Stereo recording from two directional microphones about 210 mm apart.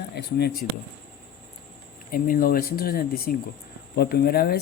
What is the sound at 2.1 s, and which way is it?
Speech, 40° left (ahead or behind).